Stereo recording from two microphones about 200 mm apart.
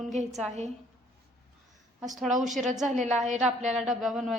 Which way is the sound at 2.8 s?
35° right (ahead or behind).